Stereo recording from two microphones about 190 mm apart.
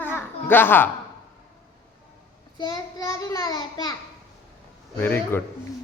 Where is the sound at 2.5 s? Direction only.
20° left (ahead or behind).